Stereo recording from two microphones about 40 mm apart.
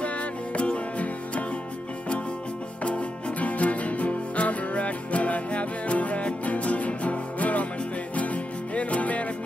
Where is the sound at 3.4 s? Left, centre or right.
Left.